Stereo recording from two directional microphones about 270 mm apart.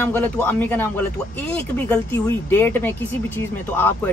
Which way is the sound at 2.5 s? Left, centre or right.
Centre.